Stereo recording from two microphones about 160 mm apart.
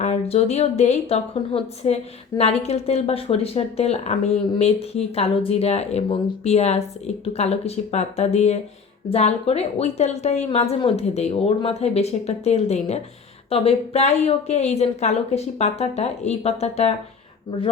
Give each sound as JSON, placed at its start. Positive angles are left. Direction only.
{"t": 0.0, "sound": "speech", "side_deg": 45}